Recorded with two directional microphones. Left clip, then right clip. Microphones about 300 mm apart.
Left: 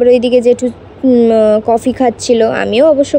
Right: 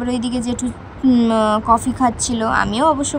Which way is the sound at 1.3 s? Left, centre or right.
Right.